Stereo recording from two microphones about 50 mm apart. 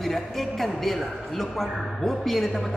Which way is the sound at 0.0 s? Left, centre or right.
Centre.